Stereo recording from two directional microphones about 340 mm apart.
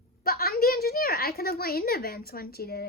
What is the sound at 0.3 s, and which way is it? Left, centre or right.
A woman's voice, left.